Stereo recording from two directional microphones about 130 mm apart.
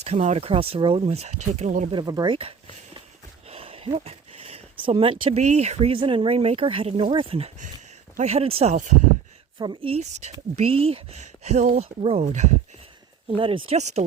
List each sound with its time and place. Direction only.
0.0 s speech: 60° right (ahead or behind)
1.9 s speech: 35° right (ahead or behind)
3.5 s a sound: 50° right (ahead or behind)
5.4 s speech: 60° right (ahead or behind)
9.6 s speech: 35° right (ahead or behind)
9.9 s speech: 60° right (ahead or behind)
10.5 s speech: 50° right (ahead or behind)
12.0 s speech: 55° right (ahead or behind)
13.3 s speech: 45° right (ahead or behind)
13.7 s speech: 60° right (ahead or behind)